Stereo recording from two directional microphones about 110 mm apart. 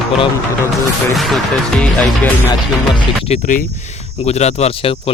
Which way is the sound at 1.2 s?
Centre (ahead or behind).